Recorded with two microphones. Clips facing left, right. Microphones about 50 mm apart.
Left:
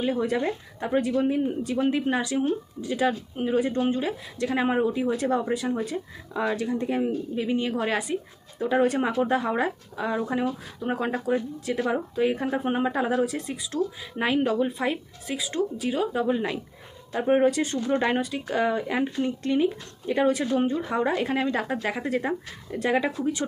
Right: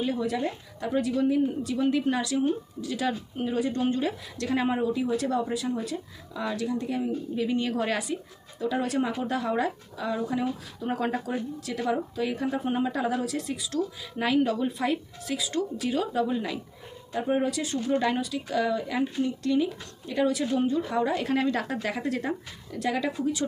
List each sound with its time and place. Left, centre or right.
0.0 s speech: left
3.1 s speech: centre
3.8 s a woman's voice: centre
8.5 s speech: left
10.8 s a woman's voice: centre
17.1 s speech: left
21.2 s speech: centre; by 23.5 s left